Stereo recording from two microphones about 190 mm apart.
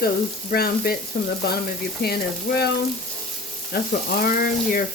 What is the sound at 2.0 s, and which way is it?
Frying, 55° left (ahead or behind).